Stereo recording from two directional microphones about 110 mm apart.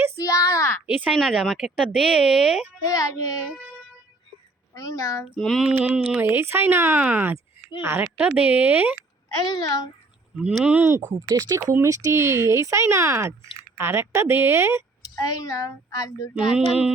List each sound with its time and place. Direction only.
0.2 s a sound: 30° left (ahead or behind)
0.9 s speech: 10° right (ahead or behind)
1.1 s speech: centre (ahead or behind)
2.8 s a child's voice: 30° left (ahead or behind)
4.7 s a child's voice: 30° left (ahead or behind)
5.2 s speech: centre (ahead or behind)
5.7 s speech: 10° right (ahead or behind)
8.0 s speech: 10° right (ahead or behind)
9.6 s a child's voice: 40° left (ahead or behind)
10.3 s speech: 5° right (ahead or behind)
10.8 s speech: 20° right (ahead or behind)
11.3 s speech: 35° right (ahead or behind)
15.1 s speech: 30° left (ahead or behind)
16.3 s speech: 5° right (ahead or behind)